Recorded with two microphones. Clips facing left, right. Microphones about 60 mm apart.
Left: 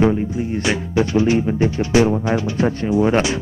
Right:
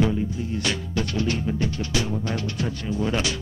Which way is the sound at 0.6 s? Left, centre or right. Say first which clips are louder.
Left 9 dB; centre.